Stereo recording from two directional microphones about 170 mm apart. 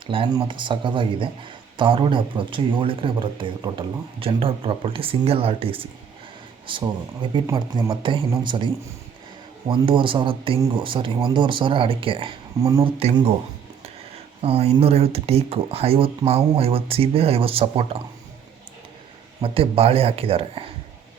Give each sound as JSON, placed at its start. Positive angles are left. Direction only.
{"t": 0.1, "sound": "speech", "side_deg": -30}
{"t": 13.0, "sound": "speech", "side_deg": -35}
{"t": 14.4, "sound": "speech", "side_deg": -35}
{"t": 19.4, "sound": "speech", "side_deg": -35}